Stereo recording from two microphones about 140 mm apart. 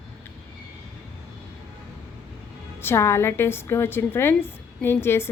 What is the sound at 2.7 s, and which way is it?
A woman's voice, 15° left (ahead or behind).